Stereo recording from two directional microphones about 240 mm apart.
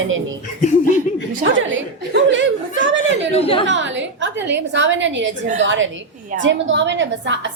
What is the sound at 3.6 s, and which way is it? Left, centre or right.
A woman's voice, right.